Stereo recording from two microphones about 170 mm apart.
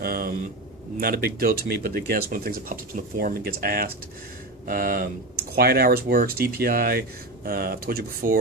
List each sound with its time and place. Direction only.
0.0 s speech: 60° right (ahead or behind)